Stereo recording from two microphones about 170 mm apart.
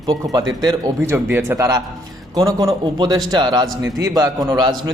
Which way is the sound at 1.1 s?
15° right (ahead or behind).